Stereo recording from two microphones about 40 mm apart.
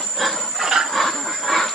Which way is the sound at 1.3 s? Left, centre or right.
Centre.